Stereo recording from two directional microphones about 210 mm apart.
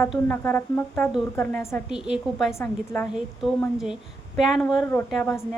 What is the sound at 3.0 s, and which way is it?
A woman's voice, centre (ahead or behind).